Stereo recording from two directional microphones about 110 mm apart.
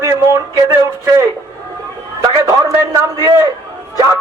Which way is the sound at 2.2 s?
40° right (ahead or behind).